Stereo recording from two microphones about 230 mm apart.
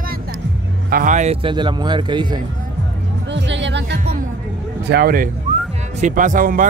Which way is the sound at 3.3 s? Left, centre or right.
Right.